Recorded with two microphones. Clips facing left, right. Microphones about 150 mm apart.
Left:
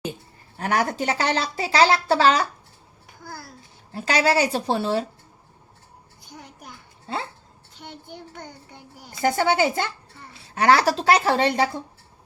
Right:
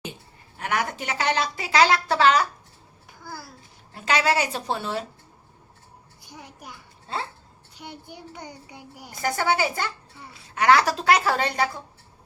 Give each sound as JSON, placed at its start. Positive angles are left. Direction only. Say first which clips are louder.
{"t": 0.5, "sound": "a woman's voice", "louder": "left 4 dB", "side_deg": 35}
{"t": 3.2, "sound": "a child's voice", "louder": "even", "side_deg": -5}
{"t": 3.9, "sound": "a woman's voice", "louder": "left 2 dB", "side_deg": 35}
{"t": 6.2, "sound": "a child's voice", "louder": "even", "side_deg": -5}
{"t": 7.8, "sound": "a child's voice", "louder": "left 1 dB", "side_deg": -10}
{"t": 9.2, "sound": "a woman's voice", "louder": "left 4 dB", "side_deg": 25}